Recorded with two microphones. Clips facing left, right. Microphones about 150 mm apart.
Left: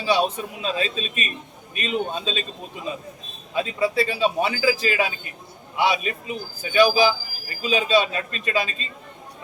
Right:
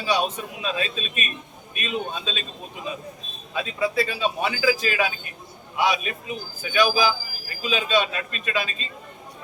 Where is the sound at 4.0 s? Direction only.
30° left (ahead or behind).